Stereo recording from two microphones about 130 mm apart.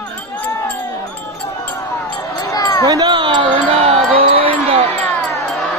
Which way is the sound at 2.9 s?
35° right (ahead or behind).